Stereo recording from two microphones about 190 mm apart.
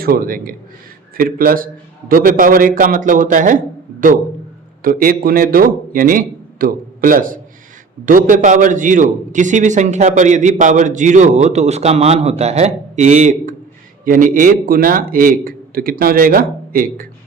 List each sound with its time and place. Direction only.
0.0 s a man's voice: 50° right (ahead or behind)
4.8 s a man's voice: 50° right (ahead or behind)